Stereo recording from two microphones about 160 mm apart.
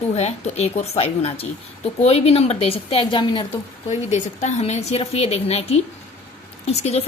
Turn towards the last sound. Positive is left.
turn(degrees=40)  # may be behind; listen again after turning